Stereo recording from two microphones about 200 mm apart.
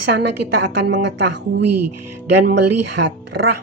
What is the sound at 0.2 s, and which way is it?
Speech, 60° right (ahead or behind).